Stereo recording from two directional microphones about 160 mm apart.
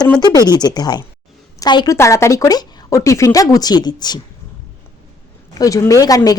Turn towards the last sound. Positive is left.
turn(degrees=20)  # may be behind; listen again after turning